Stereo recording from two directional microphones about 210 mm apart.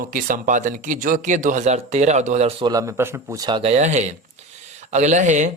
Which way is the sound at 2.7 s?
15° right (ahead or behind).